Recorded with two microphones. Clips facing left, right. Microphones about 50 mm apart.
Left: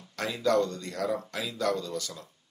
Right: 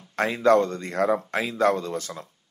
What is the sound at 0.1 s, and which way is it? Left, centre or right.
Speech, right.